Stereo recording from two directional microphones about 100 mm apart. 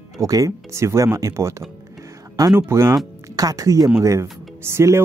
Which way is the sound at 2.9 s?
35° right (ahead or behind).